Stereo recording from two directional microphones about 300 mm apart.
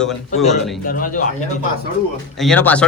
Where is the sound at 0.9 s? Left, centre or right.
Left.